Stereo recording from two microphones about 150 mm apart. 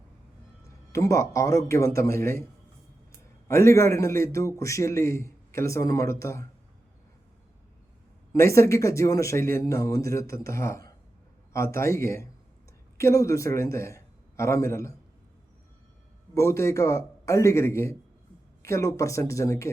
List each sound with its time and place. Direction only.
0.9 s a man's voice: 20° left (ahead or behind)
3.5 s a man's voice: 20° left (ahead or behind)
8.3 s a man's voice: 20° left (ahead or behind)
16.3 s a man's voice: 20° left (ahead or behind)